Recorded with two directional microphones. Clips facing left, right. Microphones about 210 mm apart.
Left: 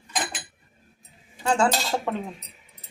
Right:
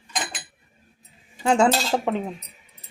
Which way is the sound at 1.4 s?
20° right (ahead or behind).